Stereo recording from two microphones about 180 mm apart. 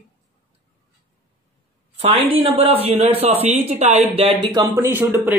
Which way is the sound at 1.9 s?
30° right (ahead or behind).